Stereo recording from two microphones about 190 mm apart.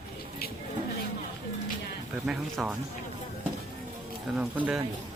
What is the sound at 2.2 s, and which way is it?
Speech, 5° right (ahead or behind).